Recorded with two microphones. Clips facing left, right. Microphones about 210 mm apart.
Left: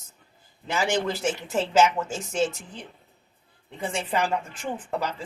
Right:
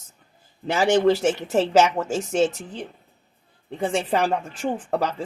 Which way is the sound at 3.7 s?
40° right (ahead or behind).